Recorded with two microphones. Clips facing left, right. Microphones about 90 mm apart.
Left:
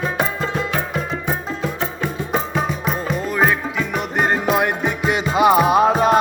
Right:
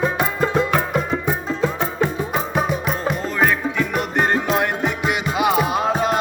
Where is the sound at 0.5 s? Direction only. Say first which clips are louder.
Right 4 dB; 45° right (ahead or behind).